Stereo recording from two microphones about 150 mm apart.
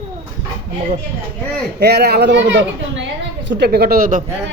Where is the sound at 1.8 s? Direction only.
90° right.